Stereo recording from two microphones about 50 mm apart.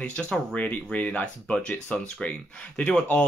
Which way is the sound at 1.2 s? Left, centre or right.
Centre.